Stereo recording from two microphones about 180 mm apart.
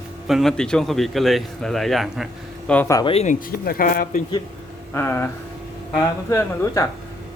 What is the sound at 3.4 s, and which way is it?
Speech, 55° left (ahead or behind).